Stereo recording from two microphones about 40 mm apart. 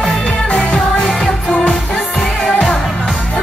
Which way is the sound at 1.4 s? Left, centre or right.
Left.